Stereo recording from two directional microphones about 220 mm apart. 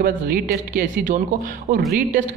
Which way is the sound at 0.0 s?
40° right (ahead or behind).